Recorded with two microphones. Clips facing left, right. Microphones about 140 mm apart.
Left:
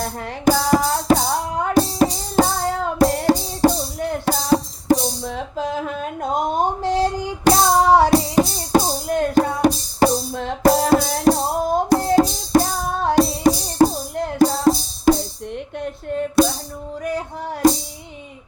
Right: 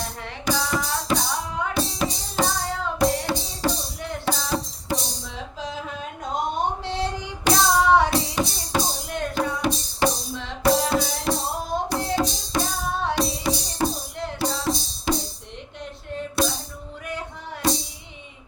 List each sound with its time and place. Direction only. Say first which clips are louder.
0.0 s music: left 10 dB; 45° left (ahead or behind)
5.2 s a sound: left 8 dB; 50° left (ahead or behind)
11.1 s music: left 9 dB; 45° left (ahead or behind)